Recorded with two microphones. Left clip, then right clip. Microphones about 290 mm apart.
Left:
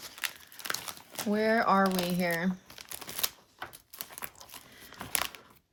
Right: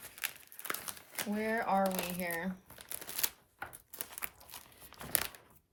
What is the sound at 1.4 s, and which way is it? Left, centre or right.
Throat clearing, centre.